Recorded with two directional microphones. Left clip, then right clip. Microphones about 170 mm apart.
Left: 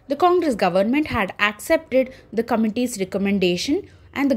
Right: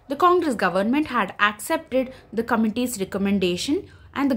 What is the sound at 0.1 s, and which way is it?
A woman's voice, 15° left (ahead or behind).